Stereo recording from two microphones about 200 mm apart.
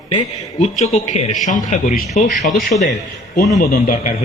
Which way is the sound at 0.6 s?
35° left (ahead or behind).